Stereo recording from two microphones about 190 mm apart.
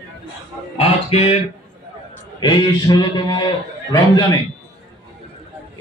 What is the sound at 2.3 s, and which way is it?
A man's voice, 25° left (ahead or behind).